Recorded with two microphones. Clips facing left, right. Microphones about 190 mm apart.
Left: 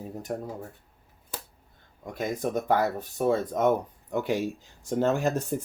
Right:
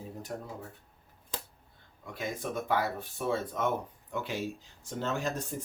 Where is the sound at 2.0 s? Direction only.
45° left (ahead or behind).